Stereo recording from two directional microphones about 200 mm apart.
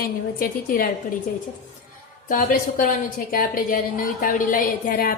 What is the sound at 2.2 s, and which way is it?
A woman's voice, 45° left (ahead or behind).